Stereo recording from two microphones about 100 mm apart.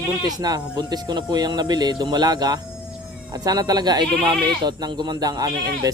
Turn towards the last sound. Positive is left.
turn(degrees=-40)  # may be behind; listen again after turning